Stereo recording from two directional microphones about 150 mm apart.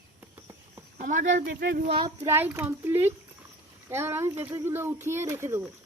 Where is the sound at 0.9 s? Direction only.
60° right (ahead or behind).